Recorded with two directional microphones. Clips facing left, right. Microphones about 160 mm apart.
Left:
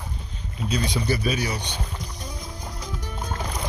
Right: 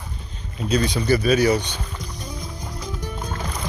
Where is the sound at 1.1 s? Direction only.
60° right (ahead or behind).